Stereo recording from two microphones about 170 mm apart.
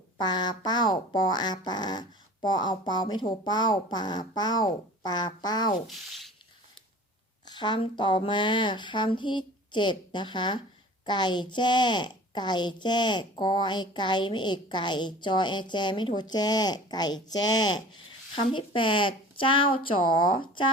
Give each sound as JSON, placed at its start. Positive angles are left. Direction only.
{"t": 0.2, "sound": "speech", "side_deg": 25}
{"t": 6.1, "sound": "rub", "side_deg": 0}
{"t": 7.4, "sound": "a woman's voice", "side_deg": 25}